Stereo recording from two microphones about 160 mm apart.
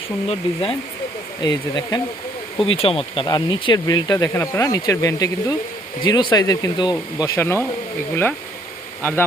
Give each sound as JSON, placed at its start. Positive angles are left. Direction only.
{"t": 0.3, "sound": "speech", "side_deg": 35}
{"t": 9.0, "sound": "speech", "side_deg": 15}